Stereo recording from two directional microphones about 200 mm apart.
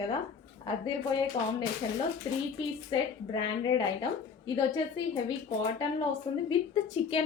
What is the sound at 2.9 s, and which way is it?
A woman's voice, 20° left (ahead or behind).